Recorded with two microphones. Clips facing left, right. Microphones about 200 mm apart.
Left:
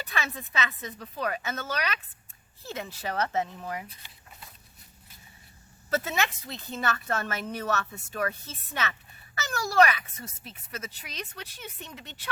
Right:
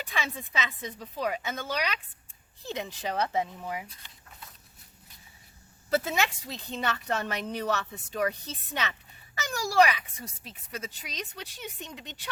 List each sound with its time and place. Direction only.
0.1 s speech: 15° right (ahead or behind)
5.9 s speech: 10° right (ahead or behind)